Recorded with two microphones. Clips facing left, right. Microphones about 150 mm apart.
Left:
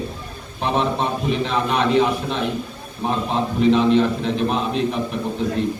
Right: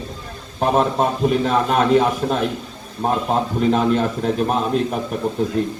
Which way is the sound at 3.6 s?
45° right (ahead or behind).